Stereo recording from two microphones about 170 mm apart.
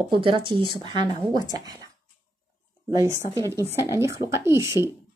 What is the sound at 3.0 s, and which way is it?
Speech, 15° right (ahead or behind).